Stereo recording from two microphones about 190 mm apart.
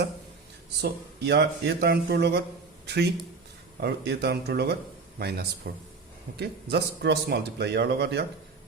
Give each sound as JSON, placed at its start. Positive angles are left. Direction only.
{"t": 0.8, "sound": "a man's voice", "side_deg": -60}